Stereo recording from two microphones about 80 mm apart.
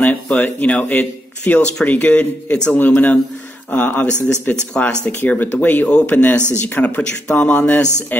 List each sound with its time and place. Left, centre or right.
0.0 s speech: left